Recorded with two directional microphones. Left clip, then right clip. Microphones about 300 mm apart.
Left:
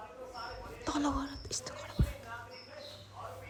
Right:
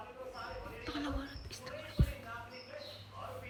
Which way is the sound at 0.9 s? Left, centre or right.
Centre.